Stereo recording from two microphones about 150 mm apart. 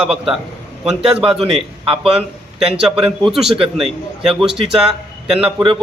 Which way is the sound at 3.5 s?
35° right (ahead or behind).